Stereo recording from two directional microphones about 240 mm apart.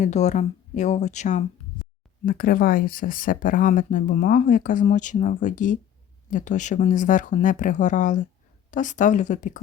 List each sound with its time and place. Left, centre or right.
0.0 s speech: left